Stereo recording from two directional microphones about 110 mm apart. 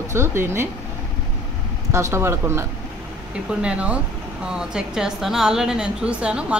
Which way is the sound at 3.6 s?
10° right (ahead or behind).